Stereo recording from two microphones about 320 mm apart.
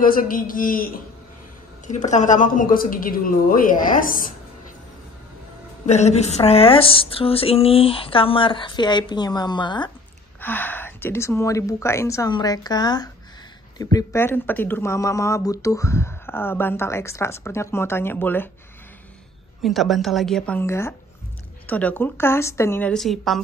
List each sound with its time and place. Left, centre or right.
0.0 s speech: left
1.9 s speech: left
5.9 s speech: left
19.6 s a woman's voice: centre